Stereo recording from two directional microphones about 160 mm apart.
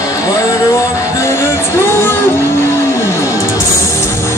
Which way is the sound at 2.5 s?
15° left (ahead or behind).